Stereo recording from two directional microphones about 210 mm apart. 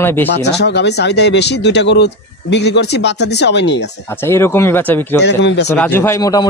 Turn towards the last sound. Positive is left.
turn(degrees=15)  # may be behind; listen again after turning